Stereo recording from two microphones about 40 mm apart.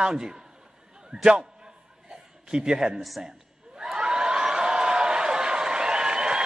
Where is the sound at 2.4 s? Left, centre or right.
Centre.